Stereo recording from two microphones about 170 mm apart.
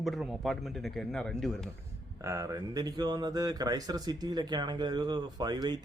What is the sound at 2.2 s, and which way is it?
Speech, 20° right (ahead or behind).